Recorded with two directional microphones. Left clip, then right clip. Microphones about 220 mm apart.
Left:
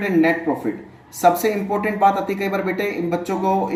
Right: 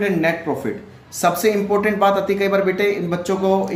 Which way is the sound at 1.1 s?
40° right (ahead or behind).